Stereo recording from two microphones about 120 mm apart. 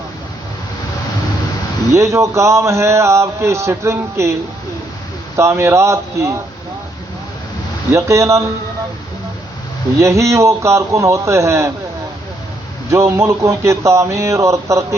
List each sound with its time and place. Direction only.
1.9 s a man's voice: 25° right (ahead or behind)
5.4 s a man's voice: 25° right (ahead or behind)
7.9 s a man's voice: 25° right (ahead or behind)
10.0 s a man's voice: 25° right (ahead or behind)
12.9 s a man's voice: 25° right (ahead or behind)